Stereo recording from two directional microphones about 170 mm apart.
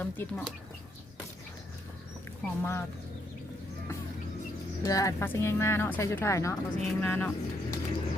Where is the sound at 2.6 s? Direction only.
15° left (ahead or behind).